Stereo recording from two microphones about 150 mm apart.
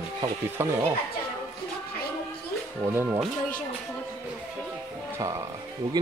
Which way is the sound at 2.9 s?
15° right (ahead or behind).